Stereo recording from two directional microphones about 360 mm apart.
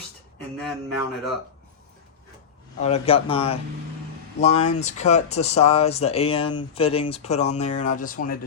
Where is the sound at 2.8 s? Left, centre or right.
Centre.